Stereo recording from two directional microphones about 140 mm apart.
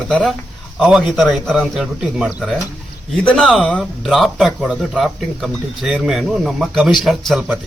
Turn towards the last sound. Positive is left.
turn(degrees=0)  # may be behind; listen again after turning